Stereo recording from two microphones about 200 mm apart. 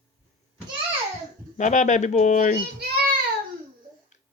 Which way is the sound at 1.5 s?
35° left (ahead or behind).